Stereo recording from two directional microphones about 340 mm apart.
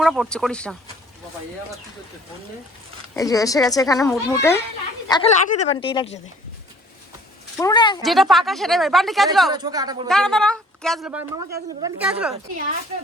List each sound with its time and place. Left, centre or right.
0.0 s a woman's voice: centre
3.2 s speech: centre
7.5 s speech: centre
8.0 s a woman's voice: centre
9.5 s speech: centre
10.1 s a woman's voice: centre